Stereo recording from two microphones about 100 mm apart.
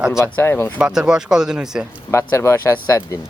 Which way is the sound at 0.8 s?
10° right (ahead or behind).